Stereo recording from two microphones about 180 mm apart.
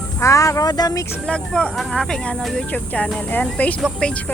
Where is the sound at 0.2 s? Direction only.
15° left (ahead or behind).